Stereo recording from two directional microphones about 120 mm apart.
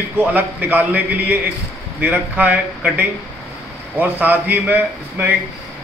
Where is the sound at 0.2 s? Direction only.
15° right (ahead or behind).